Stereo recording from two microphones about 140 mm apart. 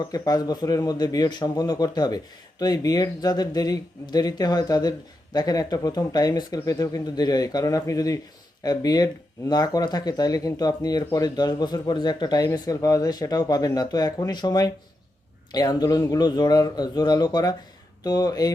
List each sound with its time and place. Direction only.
0.0 s speech: 25° left (ahead or behind)